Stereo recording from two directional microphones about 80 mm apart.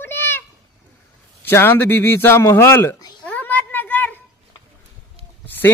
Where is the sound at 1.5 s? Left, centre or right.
Left.